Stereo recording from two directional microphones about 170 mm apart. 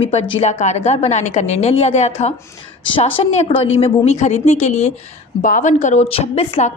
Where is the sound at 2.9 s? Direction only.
30° left (ahead or behind).